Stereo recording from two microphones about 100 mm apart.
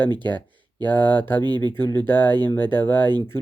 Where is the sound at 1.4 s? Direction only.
45° right (ahead or behind).